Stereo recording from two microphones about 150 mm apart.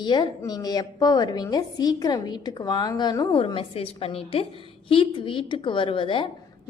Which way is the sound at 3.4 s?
40° left (ahead or behind).